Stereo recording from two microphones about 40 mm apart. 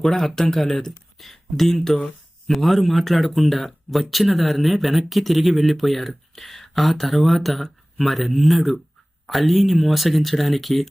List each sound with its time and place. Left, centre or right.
0.0 s speech: centre